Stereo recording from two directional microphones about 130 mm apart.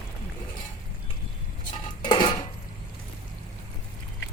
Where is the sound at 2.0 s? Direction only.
35° left (ahead or behind).